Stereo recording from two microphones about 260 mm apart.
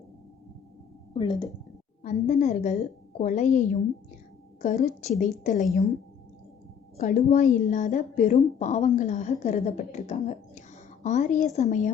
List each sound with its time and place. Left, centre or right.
1.1 s a woman's voice: centre
6.9 s a woman's voice: left